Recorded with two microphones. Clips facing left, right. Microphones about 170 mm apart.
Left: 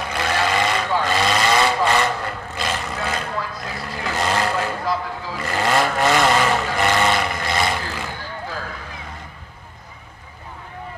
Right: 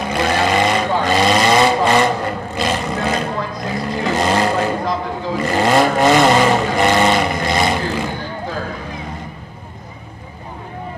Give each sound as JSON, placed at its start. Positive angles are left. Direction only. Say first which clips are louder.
{"t": 0.0, "sound": "vehicle", "louder": "right 5 dB", "side_deg": -20}